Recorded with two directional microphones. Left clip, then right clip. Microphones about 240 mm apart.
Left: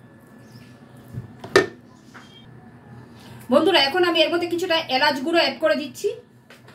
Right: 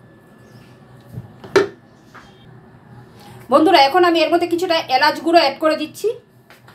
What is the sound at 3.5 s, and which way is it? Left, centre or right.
A woman's voice, right.